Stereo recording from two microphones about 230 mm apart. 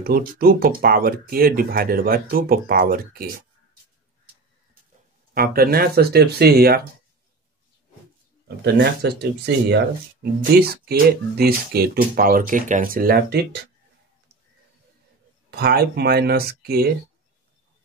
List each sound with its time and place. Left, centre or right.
0.0 s speech: right
5.3 s speech: right
8.7 s speech: right
15.5 s speech: right